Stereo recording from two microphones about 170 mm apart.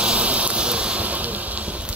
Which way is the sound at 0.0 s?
5° right (ahead or behind).